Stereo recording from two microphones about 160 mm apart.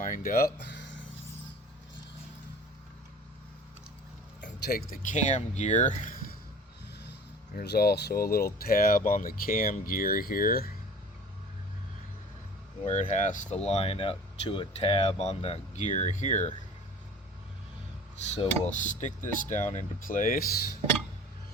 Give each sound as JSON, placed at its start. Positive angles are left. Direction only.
{"t": 0.0, "sound": "speech", "side_deg": 55}
{"t": 4.6, "sound": "speech", "side_deg": 70}
{"t": 7.0, "sound": "speech", "side_deg": 90}
{"t": 12.8, "sound": "speech", "side_deg": 50}
{"t": 13.7, "sound": "speech", "side_deg": 40}
{"t": 18.3, "sound": "speech", "side_deg": 45}